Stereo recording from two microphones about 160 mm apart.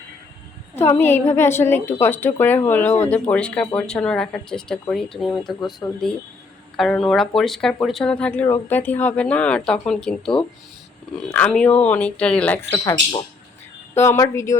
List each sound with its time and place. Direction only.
0.8 s speech: 15° left (ahead or behind)
12.7 s speech: 25° left (ahead or behind)